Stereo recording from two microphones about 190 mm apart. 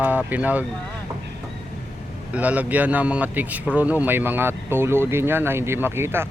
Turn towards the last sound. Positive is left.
turn(degrees=-10)  # may be behind; listen again after turning